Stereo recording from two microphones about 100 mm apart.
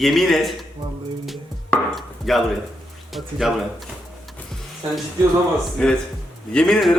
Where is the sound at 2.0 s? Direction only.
Centre (ahead or behind).